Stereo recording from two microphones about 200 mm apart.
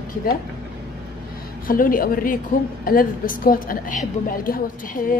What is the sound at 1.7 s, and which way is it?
A woman's voice, 45° left (ahead or behind).